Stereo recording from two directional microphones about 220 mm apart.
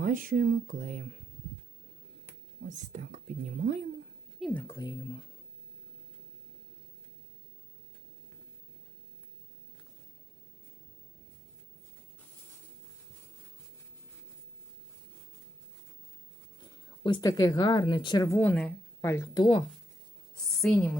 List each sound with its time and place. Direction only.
0.0 s speech: 35° right (ahead or behind)
2.6 s speech: 35° right (ahead or behind)
4.4 s a woman's voice: centre (ahead or behind)
4.6 s speech: 15° left (ahead or behind)
16.6 s speech: 20° left (ahead or behind)
20.3 s a woman's voice: centre (ahead or behind)